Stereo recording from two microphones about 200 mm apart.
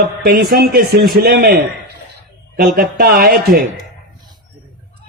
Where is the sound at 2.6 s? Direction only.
50° right (ahead or behind).